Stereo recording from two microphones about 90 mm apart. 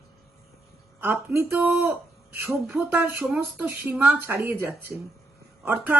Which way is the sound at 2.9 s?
20° right (ahead or behind).